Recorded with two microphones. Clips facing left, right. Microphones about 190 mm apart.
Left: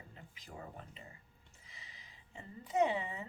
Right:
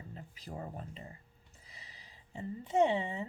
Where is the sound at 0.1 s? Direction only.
35° right (ahead or behind).